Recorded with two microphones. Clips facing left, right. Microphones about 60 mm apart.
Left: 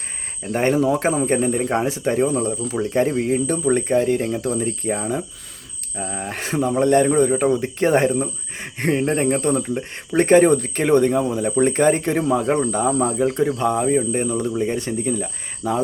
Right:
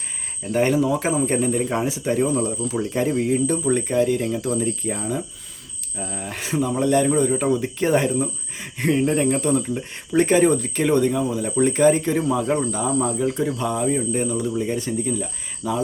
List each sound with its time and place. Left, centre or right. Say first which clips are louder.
0.5 s speech: left 1 dB; left
10.2 s speech: left 3 dB; left